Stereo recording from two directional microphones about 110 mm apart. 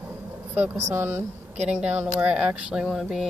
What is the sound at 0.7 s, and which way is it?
Speech, 20° right (ahead or behind).